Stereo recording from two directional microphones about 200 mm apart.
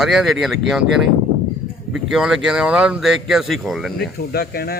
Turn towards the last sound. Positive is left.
turn(degrees=50)  # may be behind; listen again after turning